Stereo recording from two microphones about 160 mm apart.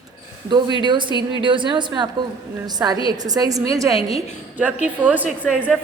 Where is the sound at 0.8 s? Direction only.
30° right (ahead or behind).